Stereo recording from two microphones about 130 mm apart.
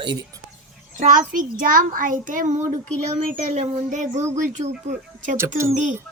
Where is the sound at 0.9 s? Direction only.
85° right.